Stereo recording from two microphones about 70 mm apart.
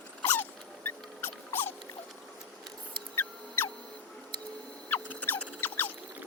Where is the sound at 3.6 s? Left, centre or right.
Left.